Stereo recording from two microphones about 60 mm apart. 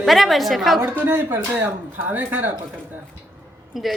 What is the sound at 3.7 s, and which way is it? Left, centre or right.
Speech, centre.